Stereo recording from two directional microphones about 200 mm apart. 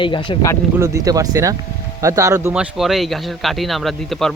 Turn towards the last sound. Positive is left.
turn(degrees=0)  # may be behind; listen again after turning